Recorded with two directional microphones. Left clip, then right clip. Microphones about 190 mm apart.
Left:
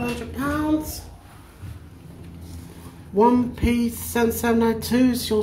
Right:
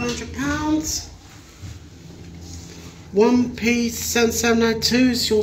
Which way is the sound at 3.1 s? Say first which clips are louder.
Right 1 dB; 10° left (ahead or behind).